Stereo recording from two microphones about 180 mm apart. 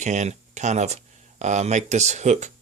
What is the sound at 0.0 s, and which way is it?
Speech, 40° right (ahead or behind).